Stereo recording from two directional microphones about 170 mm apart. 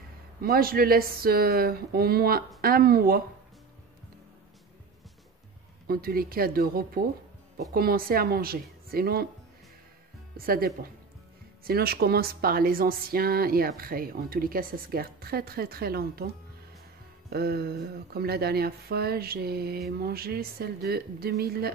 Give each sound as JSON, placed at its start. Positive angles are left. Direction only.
{"t": 0.4, "sound": "speech", "side_deg": -60}
{"t": 5.9, "sound": "speech", "side_deg": -60}
{"t": 10.3, "sound": "speech", "side_deg": -60}
{"t": 17.3, "sound": "speech", "side_deg": -65}